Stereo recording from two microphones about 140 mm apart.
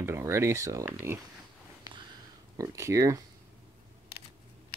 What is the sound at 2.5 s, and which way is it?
Speech, 20° right (ahead or behind).